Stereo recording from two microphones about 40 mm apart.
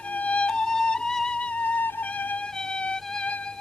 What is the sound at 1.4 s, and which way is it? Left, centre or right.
Music, left.